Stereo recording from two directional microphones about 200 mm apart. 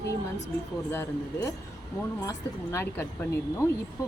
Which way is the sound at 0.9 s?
10° left (ahead or behind).